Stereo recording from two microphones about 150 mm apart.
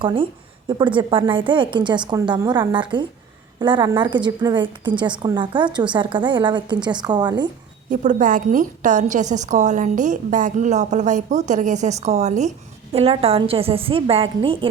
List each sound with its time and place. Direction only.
0.0 s a woman's voice: 35° right (ahead or behind)
7.9 s a woman's voice: 60° right (ahead or behind); by 14.7 s 35° right (ahead or behind)